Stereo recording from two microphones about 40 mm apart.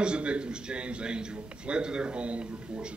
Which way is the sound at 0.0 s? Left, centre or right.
Right.